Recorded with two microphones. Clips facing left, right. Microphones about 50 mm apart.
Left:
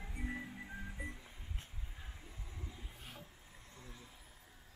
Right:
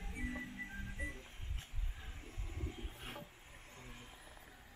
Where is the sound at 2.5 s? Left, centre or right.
Right.